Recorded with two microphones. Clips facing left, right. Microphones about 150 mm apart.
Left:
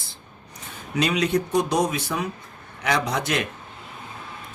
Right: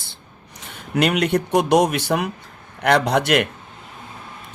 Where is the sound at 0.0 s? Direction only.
75° right (ahead or behind).